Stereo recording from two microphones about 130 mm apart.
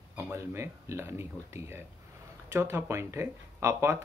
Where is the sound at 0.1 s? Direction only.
20° right (ahead or behind).